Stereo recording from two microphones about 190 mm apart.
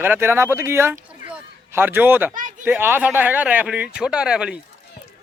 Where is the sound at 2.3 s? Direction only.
45° right (ahead or behind).